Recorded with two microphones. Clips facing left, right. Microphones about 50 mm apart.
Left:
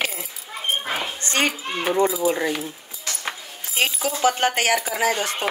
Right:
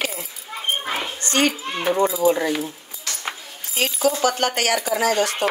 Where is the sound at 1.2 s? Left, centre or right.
Left.